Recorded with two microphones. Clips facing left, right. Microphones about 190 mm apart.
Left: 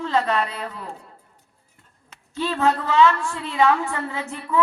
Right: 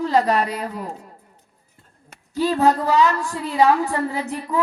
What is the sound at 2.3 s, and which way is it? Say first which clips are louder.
A woman's voice: right 4 dB; 35° right (ahead or behind).